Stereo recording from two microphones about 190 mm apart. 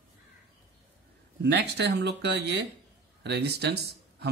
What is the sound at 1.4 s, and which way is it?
Speech, 65° right (ahead or behind).